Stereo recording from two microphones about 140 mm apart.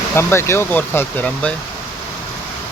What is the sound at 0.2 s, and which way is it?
Speech, 20° left (ahead or behind).